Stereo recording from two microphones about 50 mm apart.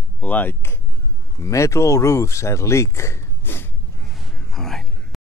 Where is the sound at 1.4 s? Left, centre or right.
Left.